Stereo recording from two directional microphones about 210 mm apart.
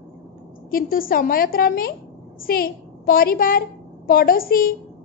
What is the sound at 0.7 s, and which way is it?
A woman's voice, 45° left (ahead or behind).